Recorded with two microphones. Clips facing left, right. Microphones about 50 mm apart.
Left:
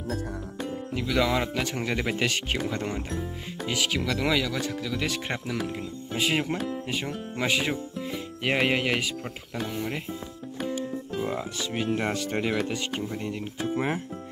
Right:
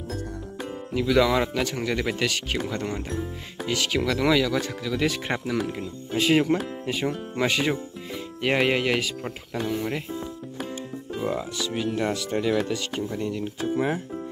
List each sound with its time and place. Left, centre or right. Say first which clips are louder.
0.9 s speech: right 5 dB; centre
3.9 s speech: right 6 dB; centre
11.1 s speech: right 3 dB; centre
11.5 s speech: right 1 dB; left